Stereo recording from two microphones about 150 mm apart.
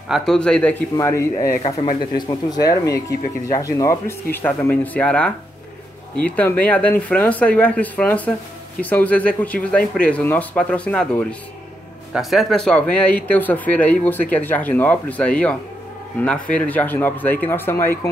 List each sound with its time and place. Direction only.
0.1 s a man's voice: 5° left (ahead or behind)
0.9 s speech: 20° left (ahead or behind)
1.8 s speech: 30° left (ahead or behind)